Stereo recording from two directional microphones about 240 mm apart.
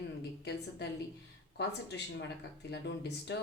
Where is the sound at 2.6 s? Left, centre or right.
Left.